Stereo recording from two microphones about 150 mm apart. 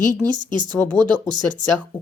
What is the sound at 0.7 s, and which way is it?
Speech, 10° left (ahead or behind).